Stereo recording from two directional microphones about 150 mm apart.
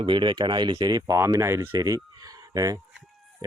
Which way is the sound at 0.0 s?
30° right (ahead or behind).